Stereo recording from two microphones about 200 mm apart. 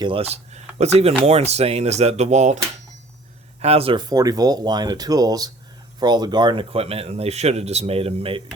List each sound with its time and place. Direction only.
0.0 s speech: 30° right (ahead or behind)
3.6 s speech: 30° right (ahead or behind)